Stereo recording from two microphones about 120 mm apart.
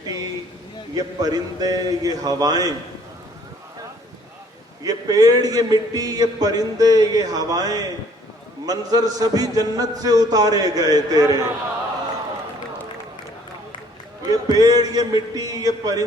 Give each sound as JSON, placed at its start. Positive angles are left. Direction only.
{"t": 0.0, "sound": "a sound", "side_deg": -30}
{"t": 0.9, "sound": "a man's voice", "side_deg": -35}
{"t": 4.8, "sound": "a man's voice", "side_deg": -30}
{"t": 14.3, "sound": "a man's voice", "side_deg": -30}